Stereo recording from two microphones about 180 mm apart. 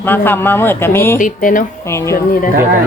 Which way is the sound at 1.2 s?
45° left (ahead or behind).